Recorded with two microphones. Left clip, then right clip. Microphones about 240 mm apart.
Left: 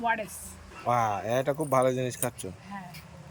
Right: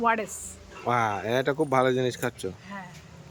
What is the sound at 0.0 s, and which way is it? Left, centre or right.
A woman's voice, centre.